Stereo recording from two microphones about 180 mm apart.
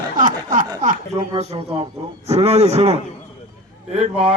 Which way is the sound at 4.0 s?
35° right (ahead or behind).